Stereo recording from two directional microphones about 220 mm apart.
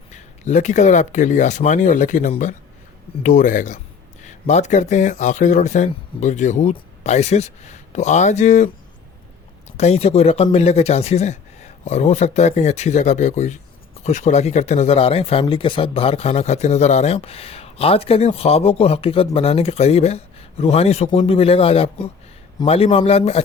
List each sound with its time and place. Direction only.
0.1 s speech: 35° left (ahead or behind)
9.7 s speech: 30° left (ahead or behind)